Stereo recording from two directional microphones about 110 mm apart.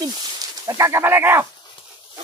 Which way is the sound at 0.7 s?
30° right (ahead or behind).